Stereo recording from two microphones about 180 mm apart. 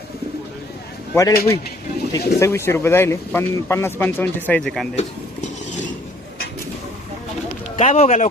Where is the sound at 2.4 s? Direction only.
15° left (ahead or behind).